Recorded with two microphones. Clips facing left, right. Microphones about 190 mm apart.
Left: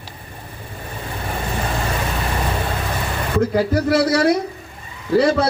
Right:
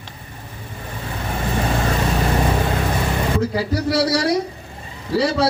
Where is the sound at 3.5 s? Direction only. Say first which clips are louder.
Left 3 dB; 50° left (ahead or behind).